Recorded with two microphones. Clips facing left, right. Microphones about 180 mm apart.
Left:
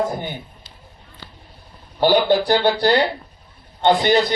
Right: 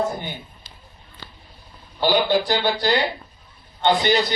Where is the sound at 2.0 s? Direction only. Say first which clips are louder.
Left 4 dB; 60° left (ahead or behind).